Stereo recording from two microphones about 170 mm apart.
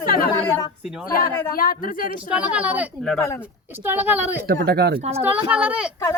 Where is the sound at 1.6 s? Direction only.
55° left (ahead or behind).